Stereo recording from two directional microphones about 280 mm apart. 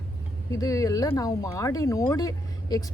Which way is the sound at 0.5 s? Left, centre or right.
Centre.